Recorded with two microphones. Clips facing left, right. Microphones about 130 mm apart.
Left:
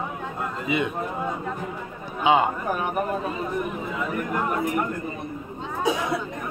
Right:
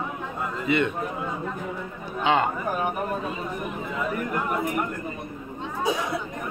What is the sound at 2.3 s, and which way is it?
Speech, 10° left (ahead or behind).